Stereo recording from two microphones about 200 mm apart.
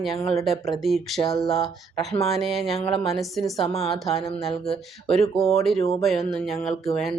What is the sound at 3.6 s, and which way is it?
Speech, 30° left (ahead or behind).